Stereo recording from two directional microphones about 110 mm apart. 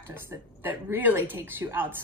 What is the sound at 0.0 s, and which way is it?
Speech, 20° right (ahead or behind).